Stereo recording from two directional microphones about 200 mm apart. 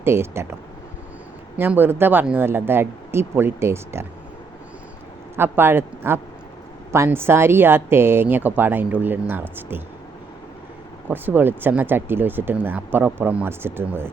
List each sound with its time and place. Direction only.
0.0 s speech: 10° right (ahead or behind)
1.5 s speech: 10° right (ahead or behind)
5.4 s speech: 10° right (ahead or behind)
11.1 s speech: 10° right (ahead or behind)